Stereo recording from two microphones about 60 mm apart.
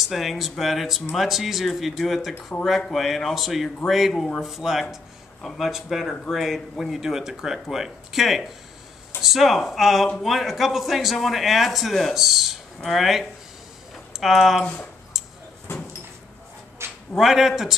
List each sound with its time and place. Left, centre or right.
0.0 s speech: centre
14.6 s speech: centre
16.8 s a sound: right
17.2 s speech: centre